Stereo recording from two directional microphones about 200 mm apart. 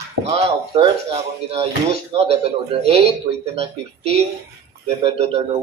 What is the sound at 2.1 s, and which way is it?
A man's voice, 30° right (ahead or behind).